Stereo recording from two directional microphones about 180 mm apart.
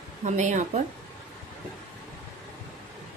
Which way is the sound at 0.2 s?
45° right (ahead or behind).